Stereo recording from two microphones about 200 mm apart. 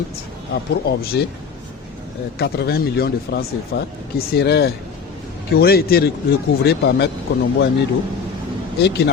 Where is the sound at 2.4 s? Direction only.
55° left (ahead or behind).